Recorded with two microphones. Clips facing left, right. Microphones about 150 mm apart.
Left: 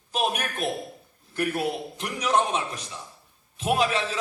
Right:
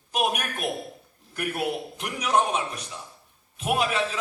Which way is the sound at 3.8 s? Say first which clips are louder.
Left 1 dB; 35° left (ahead or behind).